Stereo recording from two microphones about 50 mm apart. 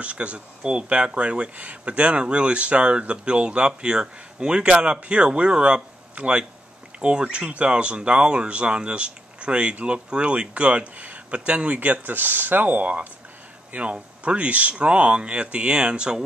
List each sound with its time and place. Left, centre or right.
0.0 s speech: right